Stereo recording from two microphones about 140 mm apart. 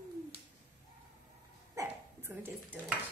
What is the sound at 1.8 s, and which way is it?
Dog, 15° right (ahead or behind).